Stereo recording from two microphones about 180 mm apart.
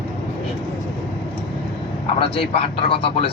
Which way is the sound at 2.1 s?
30° left (ahead or behind).